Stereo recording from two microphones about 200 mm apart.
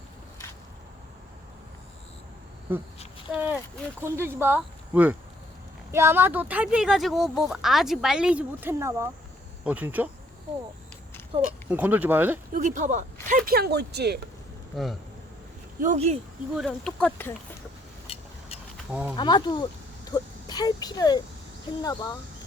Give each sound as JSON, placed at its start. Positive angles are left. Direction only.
{"t": 2.7, "sound": "speech", "side_deg": -10}
{"t": 11.4, "sound": "speech", "side_deg": -10}
{"t": 12.5, "sound": "speech", "side_deg": -40}
{"t": 14.7, "sound": "speech", "side_deg": 0}
{"t": 15.8, "sound": "speech", "side_deg": -35}
{"t": 16.6, "sound": "speech", "side_deg": 0}
{"t": 18.1, "sound": "vehicle", "side_deg": 30}
{"t": 19.1, "sound": "speech", "side_deg": 20}
{"t": 20.1, "sound": "a sound", "side_deg": 20}
{"t": 20.8, "sound": "speech", "side_deg": 20}